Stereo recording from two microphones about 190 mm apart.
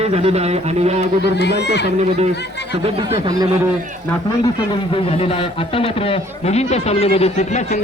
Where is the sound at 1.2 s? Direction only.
60° left (ahead or behind).